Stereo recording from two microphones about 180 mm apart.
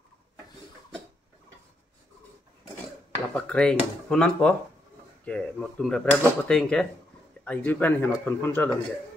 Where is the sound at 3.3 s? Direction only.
5° left (ahead or behind).